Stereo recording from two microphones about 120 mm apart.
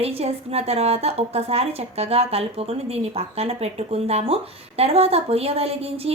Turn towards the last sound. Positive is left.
turn(degrees=-55)  # may be behind; listen again after turning